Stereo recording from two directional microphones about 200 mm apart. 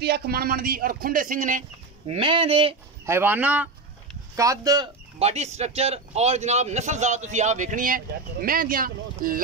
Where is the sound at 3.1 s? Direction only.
10° right (ahead or behind).